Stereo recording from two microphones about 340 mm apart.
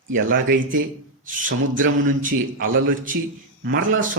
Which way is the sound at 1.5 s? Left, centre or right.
Right.